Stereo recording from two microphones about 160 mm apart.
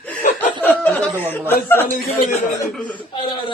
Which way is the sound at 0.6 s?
10° left (ahead or behind).